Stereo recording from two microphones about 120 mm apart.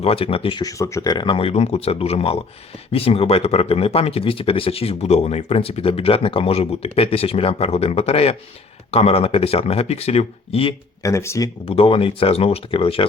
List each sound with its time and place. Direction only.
0.0 s speech: 55° left (ahead or behind)
0.6 s speech: 25° left (ahead or behind)
1.1 s speech: 40° left (ahead or behind)
11.0 s speech: 25° left (ahead or behind)
11.6 s speech: 50° left (ahead or behind)